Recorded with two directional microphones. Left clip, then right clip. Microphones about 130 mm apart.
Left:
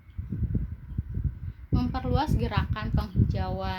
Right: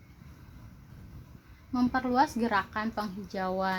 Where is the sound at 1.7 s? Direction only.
10° right (ahead or behind).